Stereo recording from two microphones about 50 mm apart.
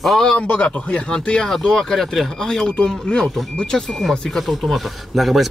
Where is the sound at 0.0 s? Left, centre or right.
Centre.